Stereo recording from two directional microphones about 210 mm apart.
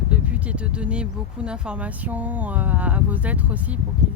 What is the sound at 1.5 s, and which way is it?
Speech, 5° right (ahead or behind).